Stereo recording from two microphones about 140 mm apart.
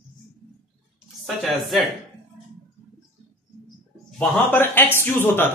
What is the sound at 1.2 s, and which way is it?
Speech, centre (ahead or behind).